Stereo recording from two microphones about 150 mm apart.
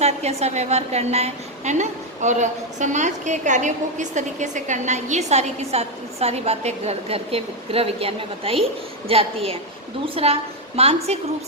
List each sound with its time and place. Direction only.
0.0 s a woman's voice: 45° right (ahead or behind)